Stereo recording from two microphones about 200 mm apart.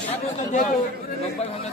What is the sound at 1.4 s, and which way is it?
Chatter, 30° left (ahead or behind).